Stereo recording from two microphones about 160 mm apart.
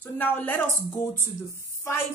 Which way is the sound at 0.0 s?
10° left (ahead or behind).